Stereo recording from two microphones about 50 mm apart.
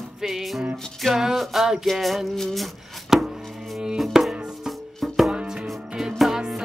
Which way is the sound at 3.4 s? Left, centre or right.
Centre.